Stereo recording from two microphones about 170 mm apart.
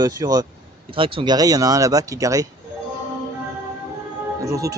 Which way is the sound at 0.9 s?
30° right (ahead or behind).